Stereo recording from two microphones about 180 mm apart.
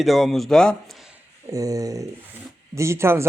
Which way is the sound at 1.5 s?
20° right (ahead or behind).